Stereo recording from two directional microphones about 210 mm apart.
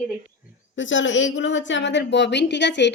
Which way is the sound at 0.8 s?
65° left (ahead or behind).